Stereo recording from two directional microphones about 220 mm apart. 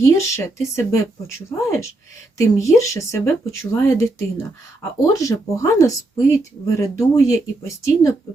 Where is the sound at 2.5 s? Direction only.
15° left (ahead or behind).